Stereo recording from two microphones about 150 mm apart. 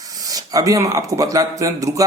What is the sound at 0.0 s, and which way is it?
Speech, 25° right (ahead or behind).